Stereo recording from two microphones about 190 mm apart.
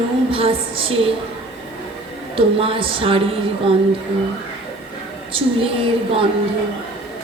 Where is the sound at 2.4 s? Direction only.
30° right (ahead or behind).